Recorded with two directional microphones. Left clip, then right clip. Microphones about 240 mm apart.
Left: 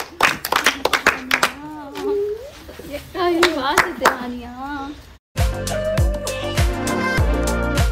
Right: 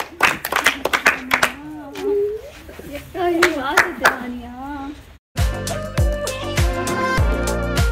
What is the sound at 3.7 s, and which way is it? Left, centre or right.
Clapping, left.